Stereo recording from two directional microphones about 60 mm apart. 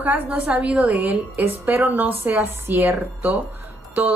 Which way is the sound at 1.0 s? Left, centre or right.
Right.